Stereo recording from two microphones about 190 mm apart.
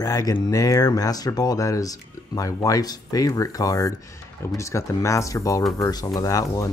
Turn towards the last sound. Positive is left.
turn(degrees=15)  # may be behind; listen again after turning